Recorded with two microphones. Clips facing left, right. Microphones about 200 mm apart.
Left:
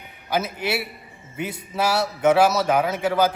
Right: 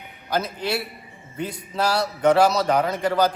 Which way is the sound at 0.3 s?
5° left (ahead or behind).